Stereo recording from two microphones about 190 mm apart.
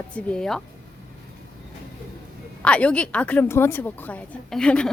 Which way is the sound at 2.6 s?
5° left (ahead or behind).